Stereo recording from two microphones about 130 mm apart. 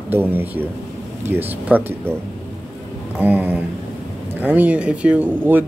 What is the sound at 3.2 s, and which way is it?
Speech, 15° right (ahead or behind).